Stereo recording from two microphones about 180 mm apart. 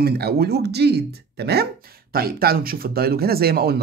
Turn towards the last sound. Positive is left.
turn(degrees=-60)  # may be behind; listen again after turning